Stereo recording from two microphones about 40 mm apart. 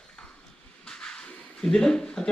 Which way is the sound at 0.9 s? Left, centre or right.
Centre.